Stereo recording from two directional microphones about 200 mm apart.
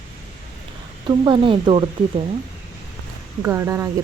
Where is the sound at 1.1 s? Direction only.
25° right (ahead or behind).